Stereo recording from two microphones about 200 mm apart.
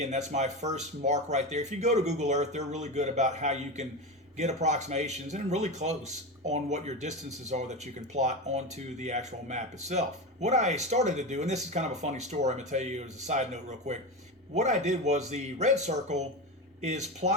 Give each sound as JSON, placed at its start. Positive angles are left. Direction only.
{"t": 0.0, "sound": "speech", "side_deg": -35}